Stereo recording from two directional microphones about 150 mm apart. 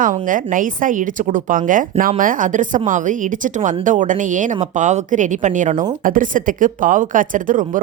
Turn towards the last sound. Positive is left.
turn(degrees=-60)  # may be behind; listen again after turning